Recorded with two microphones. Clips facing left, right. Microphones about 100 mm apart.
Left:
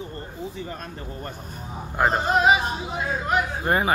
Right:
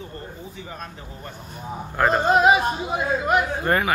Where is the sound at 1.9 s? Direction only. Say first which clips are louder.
Right 2 dB; 10° left (ahead or behind).